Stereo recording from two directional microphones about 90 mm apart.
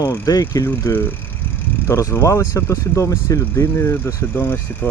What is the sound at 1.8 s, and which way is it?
Speech, 30° left (ahead or behind).